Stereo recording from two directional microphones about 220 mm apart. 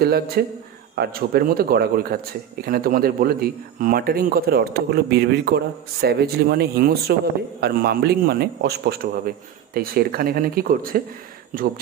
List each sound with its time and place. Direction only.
0.0 s speech: 45° right (ahead or behind)